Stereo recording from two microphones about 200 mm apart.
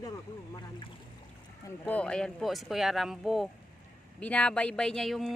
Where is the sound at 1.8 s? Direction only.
5° left (ahead or behind).